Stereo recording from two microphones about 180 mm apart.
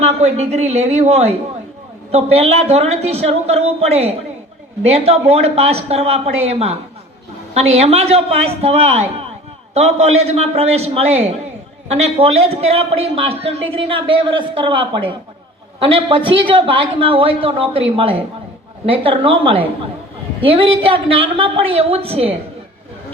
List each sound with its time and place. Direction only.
0.0 s a man's voice: 35° right (ahead or behind)
20.9 s a man's voice: 30° right (ahead or behind)